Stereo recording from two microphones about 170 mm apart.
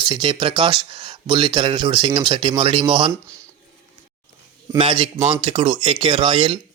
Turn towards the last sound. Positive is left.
turn(degrees=-30)  # may be behind; listen again after turning